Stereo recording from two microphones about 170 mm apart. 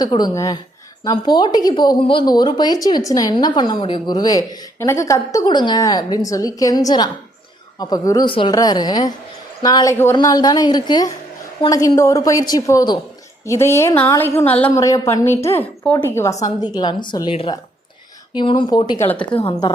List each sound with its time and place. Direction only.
0.0 s a woman's voice: 25° left (ahead or behind)
16.7 s a woman's voice: 25° left (ahead or behind)
19.1 s speech: 5° left (ahead or behind)
19.4 s speech: 30° left (ahead or behind)